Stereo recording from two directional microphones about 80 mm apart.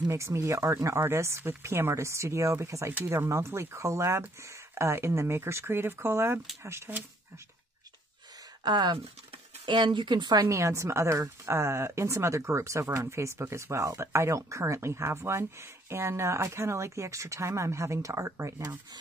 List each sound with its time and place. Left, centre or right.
0.1 s speech: right
8.6 s speech: right
9.7 s speech: right
10.5 s speech: right